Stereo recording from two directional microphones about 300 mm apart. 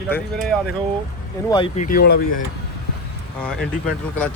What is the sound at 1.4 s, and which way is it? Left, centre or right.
Speech, centre.